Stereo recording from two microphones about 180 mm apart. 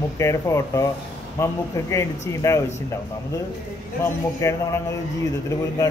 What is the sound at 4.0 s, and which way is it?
Speech, 15° left (ahead or behind).